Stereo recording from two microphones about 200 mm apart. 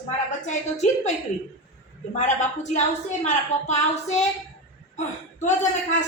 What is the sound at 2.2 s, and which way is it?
A man's voice, 35° left (ahead or behind).